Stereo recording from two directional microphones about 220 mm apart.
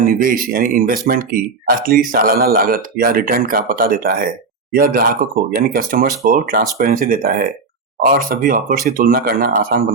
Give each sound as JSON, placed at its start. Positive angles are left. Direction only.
{"t": 0.0, "sound": "speech", "side_deg": -40}